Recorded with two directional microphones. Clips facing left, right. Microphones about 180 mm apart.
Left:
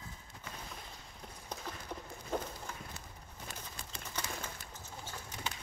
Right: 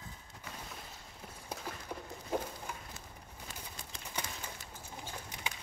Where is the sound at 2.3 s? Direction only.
10° right (ahead or behind).